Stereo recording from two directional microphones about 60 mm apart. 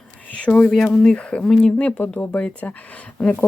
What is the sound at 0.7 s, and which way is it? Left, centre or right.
Speech, centre.